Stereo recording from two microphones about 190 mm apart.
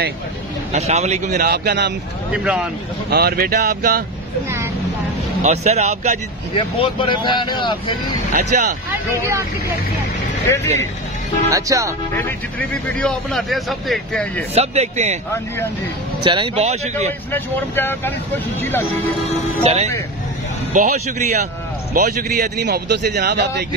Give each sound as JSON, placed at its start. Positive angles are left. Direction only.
{"t": 0.7, "sound": "speech", "side_deg": -35}
{"t": 1.5, "sound": "a man's voice", "side_deg": -60}
{"t": 2.3, "sound": "speech", "side_deg": -5}
{"t": 3.1, "sound": "speech", "side_deg": -55}
{"t": 5.4, "sound": "speech", "side_deg": -35}
{"t": 6.5, "sound": "speech", "side_deg": 25}
{"t": 8.3, "sound": "speech", "side_deg": -45}
{"t": 11.5, "sound": "speech", "side_deg": -20}
{"t": 12.2, "sound": "speech", "side_deg": 10}
{"t": 14.5, "sound": "speech", "side_deg": -35}
{"t": 16.3, "sound": "speech", "side_deg": -25}
{"t": 17.3, "sound": "speech", "side_deg": 10}
{"t": 19.6, "sound": "a man's voice", "side_deg": -35}